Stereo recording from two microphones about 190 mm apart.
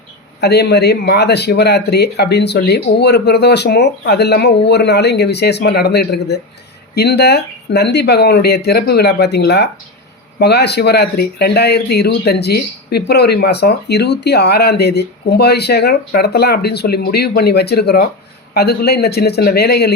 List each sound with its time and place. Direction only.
0.4 s speech: 60° left (ahead or behind)